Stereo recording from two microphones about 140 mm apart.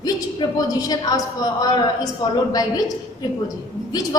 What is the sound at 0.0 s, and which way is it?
A woman's voice, 25° left (ahead or behind).